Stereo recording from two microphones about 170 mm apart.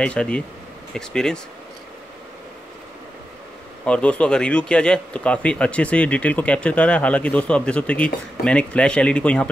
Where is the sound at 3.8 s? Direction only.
5° left (ahead or behind).